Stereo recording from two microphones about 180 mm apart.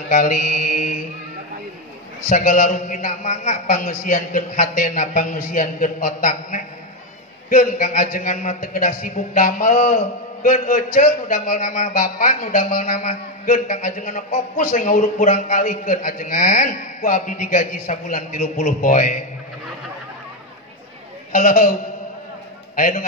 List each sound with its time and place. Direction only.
0.1 s a man's voice: 45° left (ahead or behind)
2.2 s a man's voice: 45° left (ahead or behind)
21.3 s a man's voice: 45° left (ahead or behind)
22.8 s a man's voice: 50° left (ahead or behind)